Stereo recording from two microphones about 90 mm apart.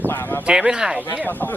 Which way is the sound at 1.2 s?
20° left (ahead or behind).